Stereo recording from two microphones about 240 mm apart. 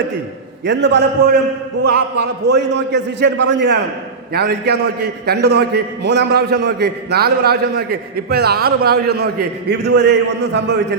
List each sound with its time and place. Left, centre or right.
0.6 s a man's voice: right